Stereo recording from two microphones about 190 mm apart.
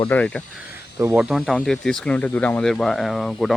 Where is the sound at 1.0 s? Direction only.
15° right (ahead or behind).